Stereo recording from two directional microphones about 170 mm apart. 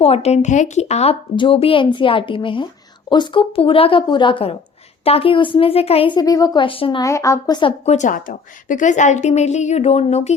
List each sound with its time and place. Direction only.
0.0 s a woman's voice: 35° left (ahead or behind)
7.0 s a woman's voice: 20° left (ahead or behind)
7.9 s a woman's voice: 45° left (ahead or behind)